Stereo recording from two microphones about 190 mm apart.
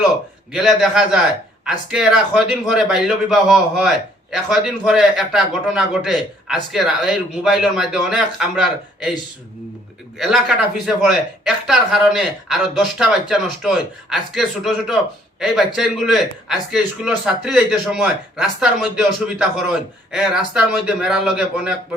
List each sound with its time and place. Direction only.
0.5 s a man's voice: centre (ahead or behind)
10.2 s a man's voice: centre (ahead or behind)